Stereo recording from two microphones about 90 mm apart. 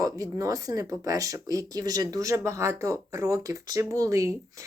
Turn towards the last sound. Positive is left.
turn(degrees=-35)  # may be behind; listen again after turning